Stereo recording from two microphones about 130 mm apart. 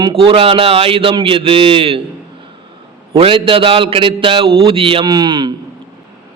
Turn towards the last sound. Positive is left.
turn(degrees=-35)  # may be behind; listen again after turning